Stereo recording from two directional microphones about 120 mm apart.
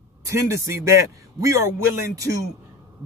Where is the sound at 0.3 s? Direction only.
25° right (ahead or behind).